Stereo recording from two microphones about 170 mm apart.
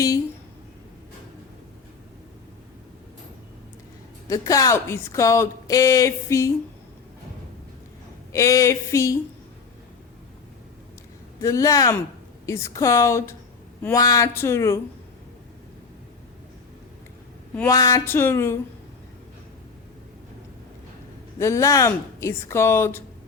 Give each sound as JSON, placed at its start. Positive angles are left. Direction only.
{"t": 4.3, "sound": "speech", "side_deg": 20}
{"t": 8.3, "sound": "speech", "side_deg": 20}
{"t": 11.3, "sound": "speech", "side_deg": 20}
{"t": 17.5, "sound": "speech", "side_deg": 10}
{"t": 17.7, "sound": "speech", "side_deg": 20}
{"t": 21.3, "sound": "speech", "side_deg": 20}